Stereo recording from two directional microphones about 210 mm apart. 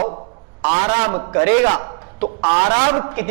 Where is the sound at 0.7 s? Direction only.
25° right (ahead or behind).